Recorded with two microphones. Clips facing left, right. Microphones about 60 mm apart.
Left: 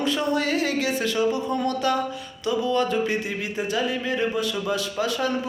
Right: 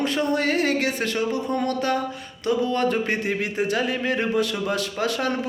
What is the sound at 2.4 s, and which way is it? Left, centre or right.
Music, right.